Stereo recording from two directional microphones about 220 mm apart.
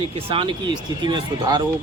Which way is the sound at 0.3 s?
20° right (ahead or behind).